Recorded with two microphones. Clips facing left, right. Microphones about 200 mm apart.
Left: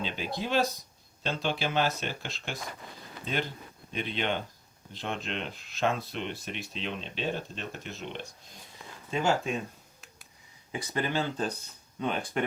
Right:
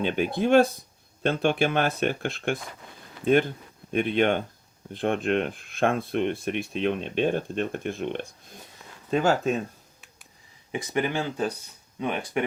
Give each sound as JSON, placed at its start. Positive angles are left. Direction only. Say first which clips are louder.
{"t": 0.0, "sound": "speech", "louder": "right 9 dB", "side_deg": -55}
{"t": 9.2, "sound": "speech", "louder": "right 4 dB", "side_deg": -40}
{"t": 10.9, "sound": "speech", "louder": "right 3 dB", "side_deg": -15}